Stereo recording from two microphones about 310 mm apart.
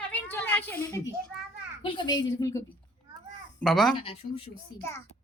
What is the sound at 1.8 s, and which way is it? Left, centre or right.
Speech, centre.